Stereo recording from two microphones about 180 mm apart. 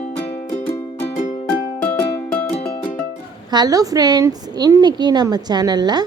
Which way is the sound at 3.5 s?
20° right (ahead or behind).